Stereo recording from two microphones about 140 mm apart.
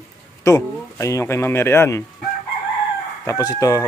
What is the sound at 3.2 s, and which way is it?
Speech, 25° left (ahead or behind).